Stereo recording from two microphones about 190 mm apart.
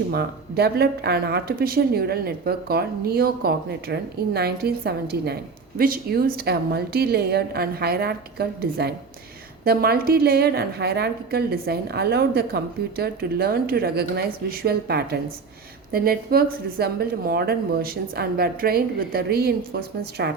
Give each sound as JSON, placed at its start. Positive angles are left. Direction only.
{"t": 0.1, "sound": "speech", "side_deg": -55}